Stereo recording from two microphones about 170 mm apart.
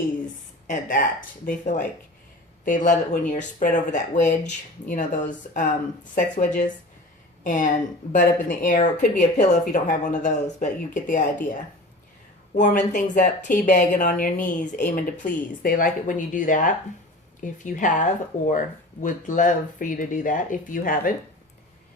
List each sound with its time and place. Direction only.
0.7 s a woman's voice: 50° left (ahead or behind)
12.5 s speech: 50° left (ahead or behind)